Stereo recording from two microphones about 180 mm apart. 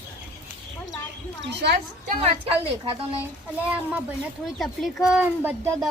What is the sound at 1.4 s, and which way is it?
Speech, 70° right (ahead or behind).